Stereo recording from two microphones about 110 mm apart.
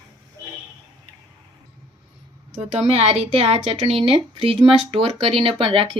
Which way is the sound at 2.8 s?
65° right (ahead or behind).